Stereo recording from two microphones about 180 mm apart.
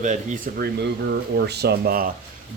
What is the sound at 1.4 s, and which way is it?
Speech, 65° right (ahead or behind).